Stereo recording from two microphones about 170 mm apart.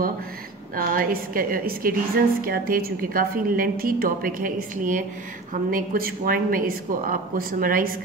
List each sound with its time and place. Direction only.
0.7 s a woman's voice: 55° right (ahead or behind)